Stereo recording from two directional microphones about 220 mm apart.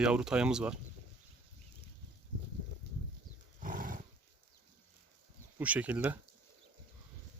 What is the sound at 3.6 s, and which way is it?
Roar, 40° right (ahead or behind).